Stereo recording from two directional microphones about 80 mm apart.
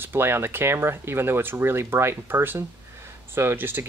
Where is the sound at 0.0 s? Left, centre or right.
Right.